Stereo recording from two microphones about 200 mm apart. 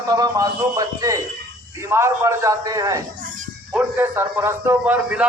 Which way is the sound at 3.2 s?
45° right (ahead or behind).